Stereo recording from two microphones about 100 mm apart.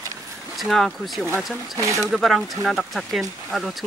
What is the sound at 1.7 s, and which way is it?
Speech, 30° right (ahead or behind).